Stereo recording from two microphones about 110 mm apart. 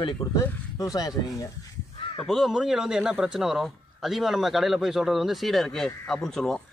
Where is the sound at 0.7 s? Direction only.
30° left (ahead or behind).